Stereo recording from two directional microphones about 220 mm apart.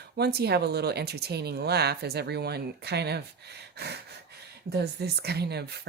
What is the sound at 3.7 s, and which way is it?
Gasp, 50° right (ahead or behind).